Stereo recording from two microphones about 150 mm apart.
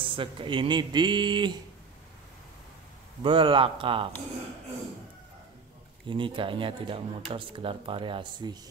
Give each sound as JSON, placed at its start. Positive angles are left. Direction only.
{"t": 0.0, "sound": "speech", "side_deg": -35}
{"t": 3.2, "sound": "speech", "side_deg": -35}
{"t": 6.0, "sound": "speech", "side_deg": -35}